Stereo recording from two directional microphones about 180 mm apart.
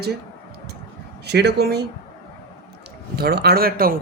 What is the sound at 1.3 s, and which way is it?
Speech, 65° right (ahead or behind).